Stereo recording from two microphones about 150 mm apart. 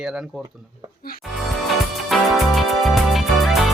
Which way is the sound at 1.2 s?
Centre (ahead or behind).